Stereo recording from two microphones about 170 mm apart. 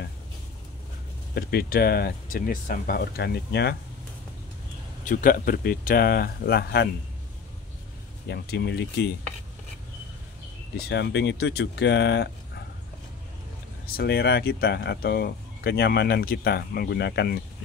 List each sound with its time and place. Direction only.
1.3 s speech: 65° left (ahead or behind)
5.0 s speech: 55° left (ahead or behind); by 6.9 s 70° left (ahead or behind)
8.3 s speech: 75° left (ahead or behind)
10.9 s speech: 90° left
13.9 s speech: 70° left (ahead or behind)